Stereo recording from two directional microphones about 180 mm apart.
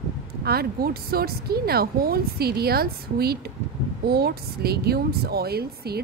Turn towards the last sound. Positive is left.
turn(degrees=-60)  # may be behind; listen again after turning